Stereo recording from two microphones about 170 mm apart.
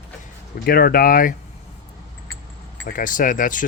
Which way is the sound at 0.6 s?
65° left (ahead or behind).